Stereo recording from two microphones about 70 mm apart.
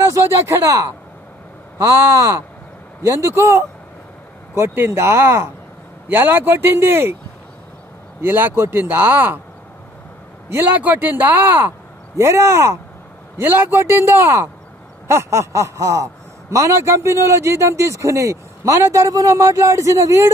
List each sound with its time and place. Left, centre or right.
0.0 s speech: right
8.2 s speech: right
10.5 s speech: right
12.2 s speech: right